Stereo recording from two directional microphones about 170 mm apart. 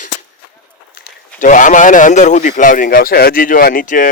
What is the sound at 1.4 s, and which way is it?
Speech, 50° left (ahead or behind).